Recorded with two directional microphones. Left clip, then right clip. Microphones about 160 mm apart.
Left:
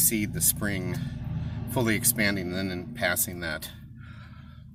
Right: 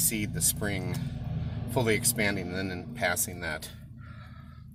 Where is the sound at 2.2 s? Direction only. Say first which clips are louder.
Left 2 dB; 15° left (ahead or behind).